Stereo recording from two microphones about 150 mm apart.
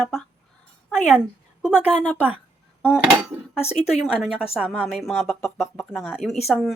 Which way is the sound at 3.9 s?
5° right (ahead or behind).